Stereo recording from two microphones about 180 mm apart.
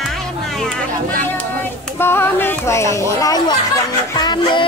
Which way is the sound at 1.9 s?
10° left (ahead or behind).